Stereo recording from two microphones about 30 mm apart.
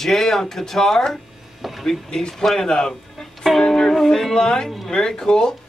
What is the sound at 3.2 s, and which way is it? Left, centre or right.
Music, centre.